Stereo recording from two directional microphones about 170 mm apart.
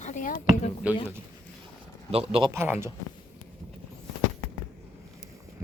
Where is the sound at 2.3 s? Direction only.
30° right (ahead or behind).